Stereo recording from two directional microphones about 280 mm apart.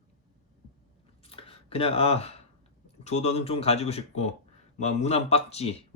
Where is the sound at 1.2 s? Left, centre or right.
Centre.